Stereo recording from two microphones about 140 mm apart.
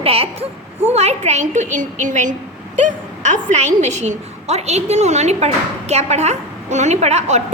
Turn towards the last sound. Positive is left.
turn(degrees=-50)  # may be behind; listen again after turning